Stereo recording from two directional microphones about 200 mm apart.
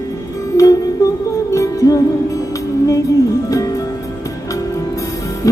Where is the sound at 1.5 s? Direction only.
15° left (ahead or behind).